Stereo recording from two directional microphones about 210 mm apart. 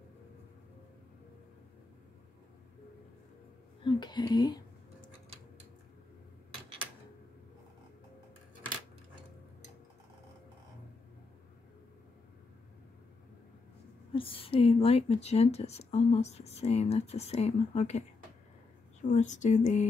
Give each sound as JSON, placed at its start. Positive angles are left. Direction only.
{"t": 3.8, "sound": "speech", "side_deg": 20}
{"t": 14.1, "sound": "speech", "side_deg": 25}
{"t": 19.0, "sound": "speech", "side_deg": 35}